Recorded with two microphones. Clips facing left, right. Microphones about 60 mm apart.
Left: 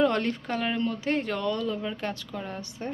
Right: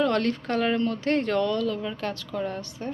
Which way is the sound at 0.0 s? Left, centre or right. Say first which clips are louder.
Right 1 dB; centre.